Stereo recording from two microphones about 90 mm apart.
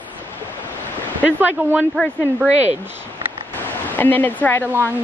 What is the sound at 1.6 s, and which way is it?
Speech, 20° right (ahead or behind).